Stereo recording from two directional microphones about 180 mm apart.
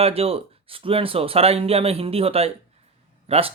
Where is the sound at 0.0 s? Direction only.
35° right (ahead or behind).